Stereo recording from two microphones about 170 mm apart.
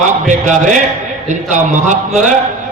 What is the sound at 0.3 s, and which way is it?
A man's voice, 50° right (ahead or behind).